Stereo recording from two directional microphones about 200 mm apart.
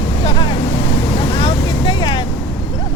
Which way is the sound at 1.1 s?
25° left (ahead or behind).